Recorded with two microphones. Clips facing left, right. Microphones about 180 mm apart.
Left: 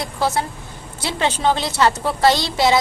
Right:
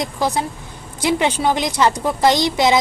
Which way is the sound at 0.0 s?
15° right (ahead or behind).